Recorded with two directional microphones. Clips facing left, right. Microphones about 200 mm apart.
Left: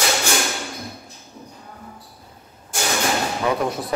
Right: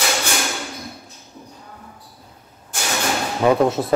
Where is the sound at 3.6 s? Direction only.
25° right (ahead or behind).